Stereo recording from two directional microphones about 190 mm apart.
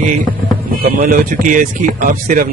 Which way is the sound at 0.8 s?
40° right (ahead or behind).